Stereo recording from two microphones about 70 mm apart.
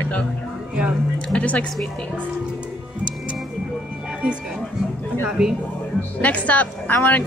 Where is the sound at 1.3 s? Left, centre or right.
Centre.